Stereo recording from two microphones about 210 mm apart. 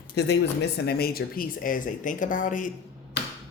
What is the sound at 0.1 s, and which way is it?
Speech, 50° left (ahead or behind).